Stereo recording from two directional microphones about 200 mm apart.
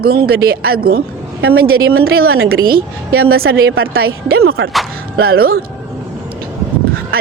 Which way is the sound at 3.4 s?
90° right.